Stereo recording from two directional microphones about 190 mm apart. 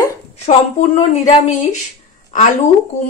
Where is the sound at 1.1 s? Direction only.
35° left (ahead or behind).